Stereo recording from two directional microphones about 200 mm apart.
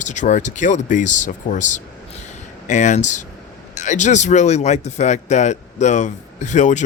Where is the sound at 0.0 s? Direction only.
35° left (ahead or behind).